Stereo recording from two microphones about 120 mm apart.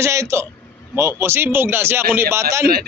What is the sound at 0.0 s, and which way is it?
A man's voice, 25° right (ahead or behind).